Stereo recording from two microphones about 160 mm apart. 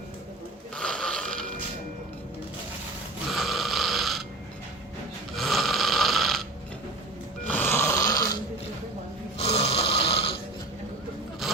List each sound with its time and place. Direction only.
0.8 s snoring: 5° left (ahead or behind)
3.2 s snoring: centre (ahead or behind)
5.3 s snoring: centre (ahead or behind)
7.4 s snoring: 10° left (ahead or behind)
9.4 s snoring: 40° left (ahead or behind)